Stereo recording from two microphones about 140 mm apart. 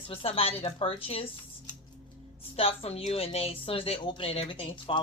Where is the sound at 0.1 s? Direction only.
45° left (ahead or behind).